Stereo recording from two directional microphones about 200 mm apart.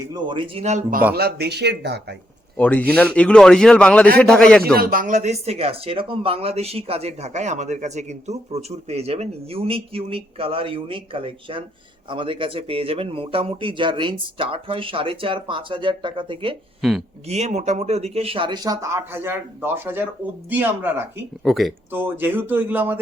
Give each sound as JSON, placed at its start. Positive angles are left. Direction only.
{"t": 0.1, "sound": "speech", "side_deg": -25}
{"t": 1.1, "sound": "speech", "side_deg": -55}
{"t": 2.6, "sound": "a man's voice", "side_deg": 5}
{"t": 4.6, "sound": "speech", "side_deg": -45}
{"t": 16.8, "sound": "a man's voice", "side_deg": 0}
{"t": 17.2, "sound": "speech", "side_deg": -35}
{"t": 21.4, "sound": "a man's voice", "side_deg": 0}
{"t": 21.9, "sound": "speech", "side_deg": -10}